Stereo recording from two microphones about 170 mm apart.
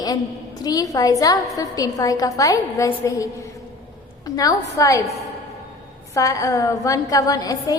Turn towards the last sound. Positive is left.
turn(degrees=20)  # may be behind; listen again after turning